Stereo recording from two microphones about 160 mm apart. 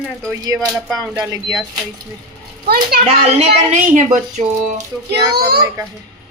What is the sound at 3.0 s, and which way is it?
A woman's voice, 45° right (ahead or behind).